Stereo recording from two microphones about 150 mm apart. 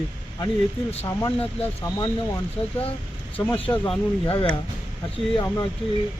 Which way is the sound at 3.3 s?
10° left (ahead or behind).